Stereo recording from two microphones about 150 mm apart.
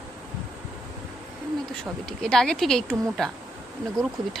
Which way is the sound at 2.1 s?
5° left (ahead or behind).